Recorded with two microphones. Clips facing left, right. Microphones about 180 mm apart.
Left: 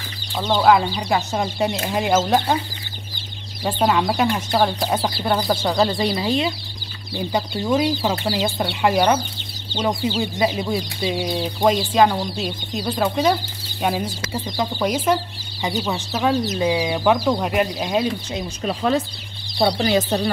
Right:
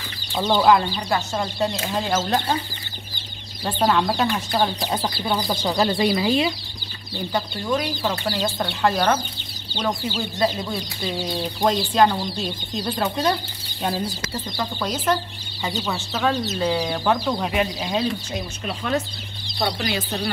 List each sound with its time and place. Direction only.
0.3 s speech: 5° right (ahead or behind)
0.9 s speech: 15° left (ahead or behind)
3.6 s speech: 10° left (ahead or behind)
7.3 s speech: 20° left (ahead or behind)
19.6 s speech: 35° left (ahead or behind)